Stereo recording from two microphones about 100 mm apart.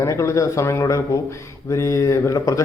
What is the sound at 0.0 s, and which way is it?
A man's voice, 30° left (ahead or behind).